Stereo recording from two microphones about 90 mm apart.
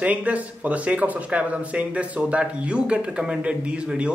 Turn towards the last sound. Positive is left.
turn(degrees=-10)  # may be behind; listen again after turning